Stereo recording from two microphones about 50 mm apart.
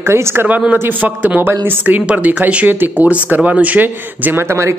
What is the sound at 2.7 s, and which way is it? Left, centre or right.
Speech, right.